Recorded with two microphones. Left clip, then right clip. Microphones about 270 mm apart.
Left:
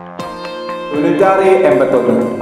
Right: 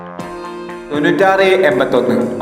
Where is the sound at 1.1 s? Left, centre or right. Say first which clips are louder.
Left 1 dB; right.